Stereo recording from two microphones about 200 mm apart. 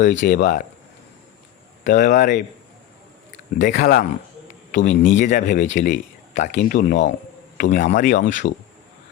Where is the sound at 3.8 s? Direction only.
45° left (ahead or behind).